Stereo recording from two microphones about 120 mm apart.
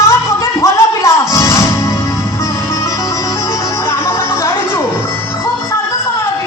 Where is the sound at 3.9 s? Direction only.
20° left (ahead or behind).